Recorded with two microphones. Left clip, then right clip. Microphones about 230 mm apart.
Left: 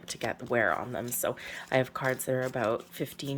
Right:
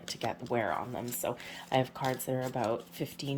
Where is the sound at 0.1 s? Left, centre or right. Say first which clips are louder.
Left 3 dB; centre.